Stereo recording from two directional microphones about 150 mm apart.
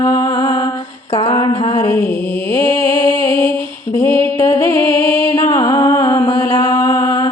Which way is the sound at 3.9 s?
15° left (ahead or behind).